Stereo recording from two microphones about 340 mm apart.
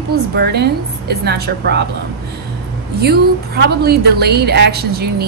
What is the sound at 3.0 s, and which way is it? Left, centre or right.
A woman's voice, right.